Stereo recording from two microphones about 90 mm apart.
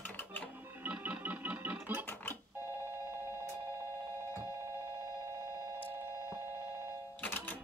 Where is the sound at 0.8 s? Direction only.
20° right (ahead or behind).